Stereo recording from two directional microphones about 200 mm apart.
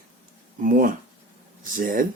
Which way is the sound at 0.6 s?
45° right (ahead or behind).